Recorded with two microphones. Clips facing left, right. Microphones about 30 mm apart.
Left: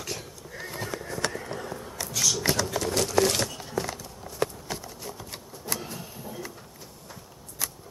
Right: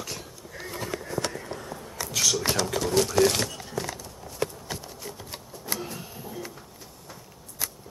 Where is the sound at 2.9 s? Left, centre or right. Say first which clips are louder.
Right 3 dB; centre.